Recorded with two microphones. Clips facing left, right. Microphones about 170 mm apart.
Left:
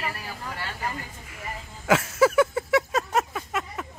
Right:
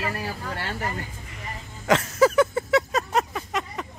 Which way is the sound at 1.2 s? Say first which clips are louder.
Left 1 dB; 5° left (ahead or behind).